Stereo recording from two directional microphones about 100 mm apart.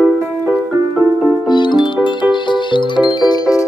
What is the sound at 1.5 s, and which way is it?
Music, 50° left (ahead or behind).